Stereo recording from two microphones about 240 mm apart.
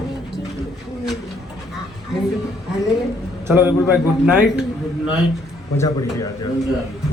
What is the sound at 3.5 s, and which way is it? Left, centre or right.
Speech, centre.